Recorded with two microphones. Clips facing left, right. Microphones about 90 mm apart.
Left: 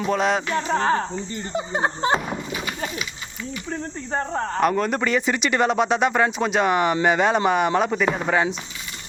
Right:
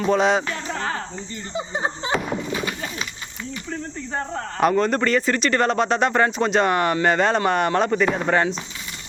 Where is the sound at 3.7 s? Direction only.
30° left (ahead or behind).